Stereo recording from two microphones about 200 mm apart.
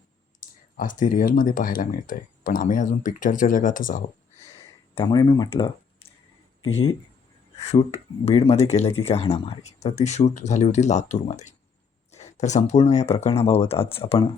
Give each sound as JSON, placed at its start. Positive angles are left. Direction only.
{"t": 0.3, "sound": "speech", "side_deg": 40}
{"t": 5.0, "sound": "speech", "side_deg": 20}
{"t": 7.6, "sound": "speech", "side_deg": 30}